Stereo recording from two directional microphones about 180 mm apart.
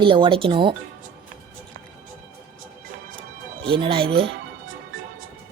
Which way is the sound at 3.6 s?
30° right (ahead or behind).